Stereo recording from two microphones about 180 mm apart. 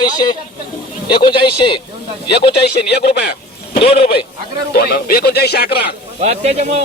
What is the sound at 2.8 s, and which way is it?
Speech, 65° left (ahead or behind).